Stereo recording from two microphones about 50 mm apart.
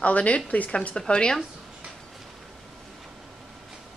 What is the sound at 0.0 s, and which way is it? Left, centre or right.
A woman's voice, left.